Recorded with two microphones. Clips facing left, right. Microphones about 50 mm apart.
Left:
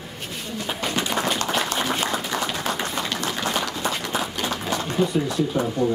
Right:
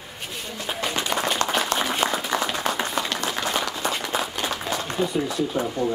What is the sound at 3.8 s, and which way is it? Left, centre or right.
Run, centre.